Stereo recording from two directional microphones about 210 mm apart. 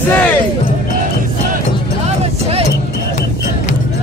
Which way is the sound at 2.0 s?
30° right (ahead or behind).